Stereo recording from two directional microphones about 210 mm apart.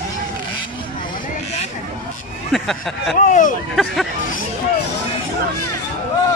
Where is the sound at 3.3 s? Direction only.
35° left (ahead or behind).